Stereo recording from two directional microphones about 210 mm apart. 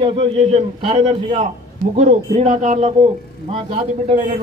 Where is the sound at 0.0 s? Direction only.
25° right (ahead or behind).